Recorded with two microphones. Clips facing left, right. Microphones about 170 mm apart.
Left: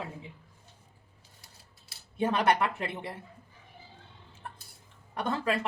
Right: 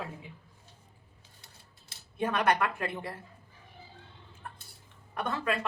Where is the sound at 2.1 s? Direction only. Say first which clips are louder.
Left 2 dB; 25° left (ahead or behind).